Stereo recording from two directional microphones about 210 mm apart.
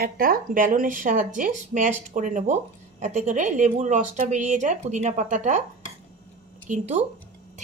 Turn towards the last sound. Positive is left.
turn(degrees=-35)  # may be behind; listen again after turning